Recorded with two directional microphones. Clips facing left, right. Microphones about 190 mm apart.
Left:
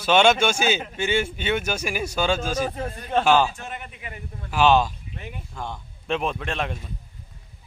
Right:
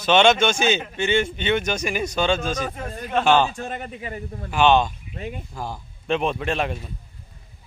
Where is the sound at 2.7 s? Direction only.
30° left (ahead or behind).